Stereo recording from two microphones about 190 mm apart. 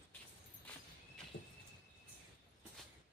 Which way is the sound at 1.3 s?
60° left (ahead or behind).